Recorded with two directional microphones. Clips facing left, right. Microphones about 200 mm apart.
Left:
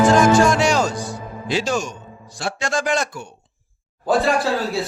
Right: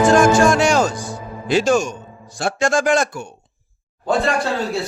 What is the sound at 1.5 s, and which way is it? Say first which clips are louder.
A man's voice: right 6 dB; 50° right (ahead or behind).